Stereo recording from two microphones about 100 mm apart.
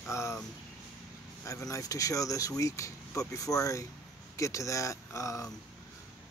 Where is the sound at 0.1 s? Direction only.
30° left (ahead or behind).